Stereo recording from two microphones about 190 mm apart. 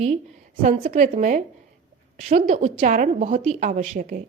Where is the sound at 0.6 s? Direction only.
40° right (ahead or behind).